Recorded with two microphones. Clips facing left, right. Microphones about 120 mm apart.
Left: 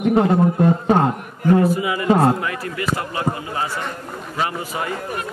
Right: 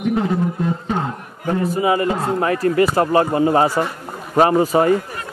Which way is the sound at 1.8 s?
35° right (ahead or behind).